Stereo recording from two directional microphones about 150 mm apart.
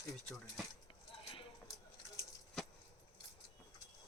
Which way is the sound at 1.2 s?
40° left (ahead or behind).